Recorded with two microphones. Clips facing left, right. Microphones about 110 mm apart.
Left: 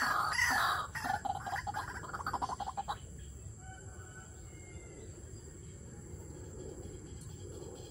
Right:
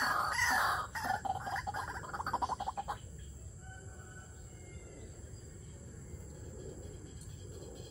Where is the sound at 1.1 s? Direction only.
5° left (ahead or behind).